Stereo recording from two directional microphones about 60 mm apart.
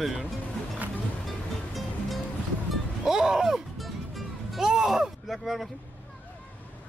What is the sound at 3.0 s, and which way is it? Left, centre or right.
Music, centre.